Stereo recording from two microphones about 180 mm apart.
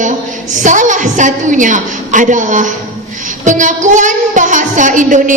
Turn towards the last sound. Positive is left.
turn(degrees=-45)  # may be behind; listen again after turning